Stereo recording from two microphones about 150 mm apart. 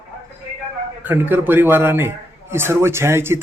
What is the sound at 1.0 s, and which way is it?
A man's voice, 10° right (ahead or behind).